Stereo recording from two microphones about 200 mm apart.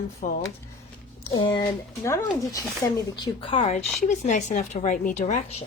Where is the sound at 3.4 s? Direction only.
35° left (ahead or behind).